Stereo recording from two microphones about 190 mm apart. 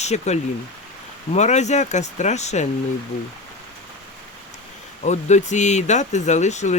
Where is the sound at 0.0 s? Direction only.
35° left (ahead or behind).